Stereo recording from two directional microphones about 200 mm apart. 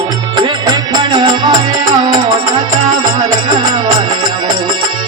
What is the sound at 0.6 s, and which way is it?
Music, 20° right (ahead or behind).